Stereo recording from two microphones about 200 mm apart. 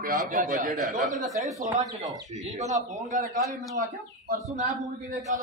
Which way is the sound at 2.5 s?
35° right (ahead or behind).